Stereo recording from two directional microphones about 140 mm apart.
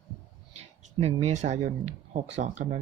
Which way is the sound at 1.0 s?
50° right (ahead or behind).